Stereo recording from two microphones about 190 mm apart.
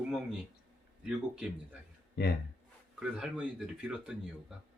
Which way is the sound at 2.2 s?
55° left (ahead or behind).